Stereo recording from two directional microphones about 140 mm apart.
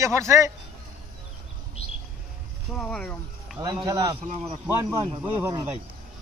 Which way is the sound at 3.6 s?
25° right (ahead or behind).